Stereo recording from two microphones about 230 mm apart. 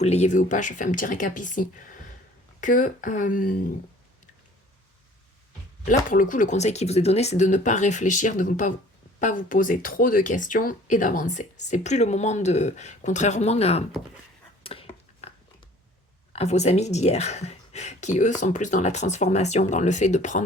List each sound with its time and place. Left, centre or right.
0.0 s speech: left
5.9 s speech: left
14.6 s a sound: left
16.3 s speech: left